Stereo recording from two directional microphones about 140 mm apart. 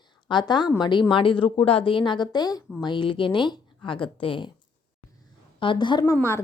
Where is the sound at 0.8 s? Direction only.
35° left (ahead or behind).